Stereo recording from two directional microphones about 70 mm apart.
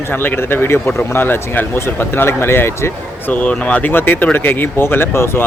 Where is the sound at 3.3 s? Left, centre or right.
Left.